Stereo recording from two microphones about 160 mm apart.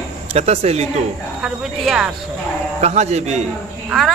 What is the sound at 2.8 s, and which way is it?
Speech, 45° right (ahead or behind).